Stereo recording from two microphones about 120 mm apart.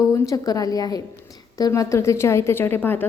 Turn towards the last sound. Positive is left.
turn(degrees=15)  # may be behind; listen again after turning